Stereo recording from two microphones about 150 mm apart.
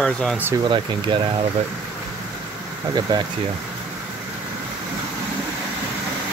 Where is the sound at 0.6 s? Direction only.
30° right (ahead or behind).